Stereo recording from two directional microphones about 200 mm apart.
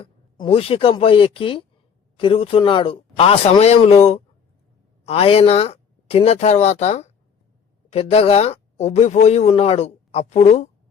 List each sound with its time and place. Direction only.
0.3 s speech: 25° left (ahead or behind)